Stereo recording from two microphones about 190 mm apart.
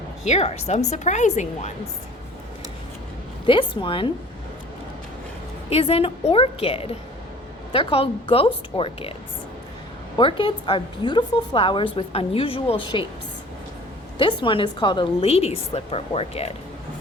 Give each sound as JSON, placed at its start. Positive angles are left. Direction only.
{"t": 0.3, "sound": "a woman's voice", "side_deg": 35}
{"t": 3.4, "sound": "a woman's voice", "side_deg": 25}
{"t": 5.6, "sound": "a woman's voice", "side_deg": 30}
{"t": 10.2, "sound": "a woman's voice", "side_deg": 25}
{"t": 14.2, "sound": "a woman's voice", "side_deg": 25}